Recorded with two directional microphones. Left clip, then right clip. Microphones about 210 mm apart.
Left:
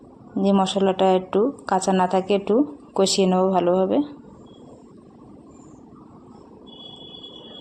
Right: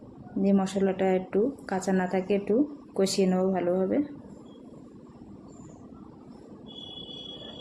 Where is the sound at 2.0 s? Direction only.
5° left (ahead or behind).